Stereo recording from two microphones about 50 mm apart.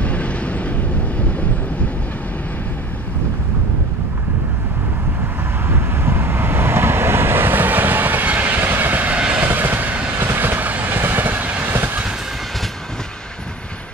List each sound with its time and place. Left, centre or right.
0.0 s vehicle: left
5.7 s vehicle: right
8.6 s vehicle: right
9.4 s train: right
10.1 s train: right
11.0 s train: right
11.7 s vehicle: right